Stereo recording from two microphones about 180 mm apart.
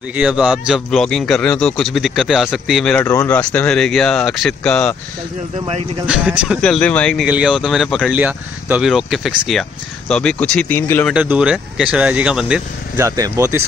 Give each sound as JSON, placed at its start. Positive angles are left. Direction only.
{"t": 0.1, "sound": "speech", "side_deg": -5}
{"t": 6.0, "sound": "speech", "side_deg": -5}
{"t": 7.2, "sound": "speech", "side_deg": -5}
{"t": 11.1, "sound": "speech", "side_deg": -5}
{"t": 12.9, "sound": "speech", "side_deg": -15}